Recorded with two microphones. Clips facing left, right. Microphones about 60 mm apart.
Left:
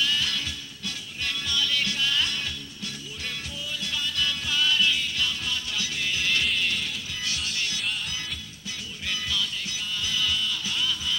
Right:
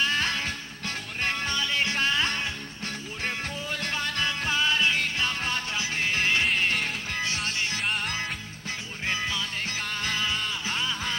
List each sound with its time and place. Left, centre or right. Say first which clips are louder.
0.0 s music: right 2 dB; right
7.8 s music: right 3 dB; right
9.0 s music: right 1 dB; right